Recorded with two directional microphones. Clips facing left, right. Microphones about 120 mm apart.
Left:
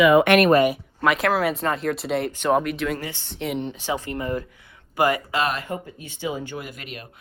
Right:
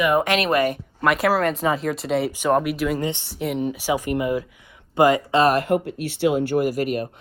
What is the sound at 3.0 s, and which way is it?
Speech, 20° right (ahead or behind).